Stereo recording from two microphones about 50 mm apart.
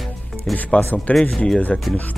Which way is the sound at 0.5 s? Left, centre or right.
Left.